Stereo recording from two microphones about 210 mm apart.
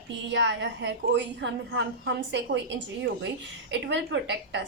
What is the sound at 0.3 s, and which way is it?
A woman's voice, 60° right (ahead or behind).